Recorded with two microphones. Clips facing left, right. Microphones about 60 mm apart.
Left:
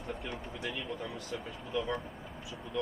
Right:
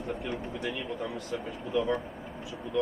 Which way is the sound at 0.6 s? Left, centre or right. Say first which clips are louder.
Right 3 dB; centre.